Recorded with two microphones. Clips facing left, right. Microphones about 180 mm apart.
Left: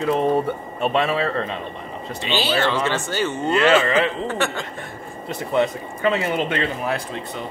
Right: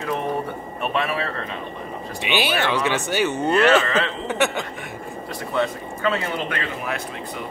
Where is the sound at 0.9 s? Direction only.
25° left (ahead or behind).